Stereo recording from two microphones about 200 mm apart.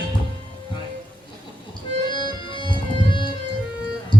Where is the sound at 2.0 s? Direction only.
25° left (ahead or behind).